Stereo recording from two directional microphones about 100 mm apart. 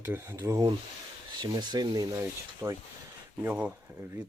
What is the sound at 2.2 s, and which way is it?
Speech, 30° right (ahead or behind).